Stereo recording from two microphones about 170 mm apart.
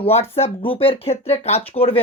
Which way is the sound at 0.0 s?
35° left (ahead or behind).